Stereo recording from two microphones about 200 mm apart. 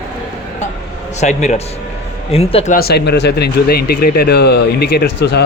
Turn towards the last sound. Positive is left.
turn(degrees=55)  # may be behind; listen again after turning